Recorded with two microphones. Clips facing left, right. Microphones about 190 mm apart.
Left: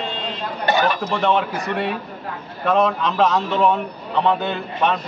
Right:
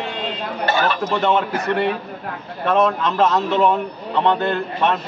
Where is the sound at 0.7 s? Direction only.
15° left (ahead or behind).